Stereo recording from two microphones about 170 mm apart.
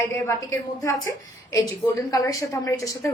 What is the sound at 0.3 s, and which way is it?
A woman's voice, 15° left (ahead or behind).